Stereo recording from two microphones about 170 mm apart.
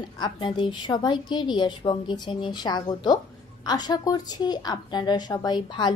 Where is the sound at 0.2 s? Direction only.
25° left (ahead or behind).